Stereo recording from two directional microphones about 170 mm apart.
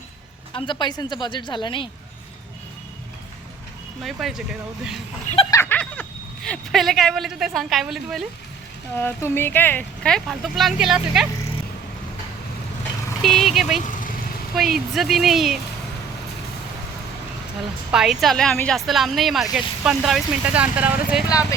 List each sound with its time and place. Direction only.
0.5 s a woman's voice: 30° left (ahead or behind)
4.0 s speech: centre (ahead or behind)
5.5 s speech: 15° left (ahead or behind)
9.0 s speech: 15° left (ahead or behind); by 11.3 s 5° right (ahead or behind)
13.2 s speech: centre (ahead or behind)
17.9 s speech: 5° right (ahead or behind)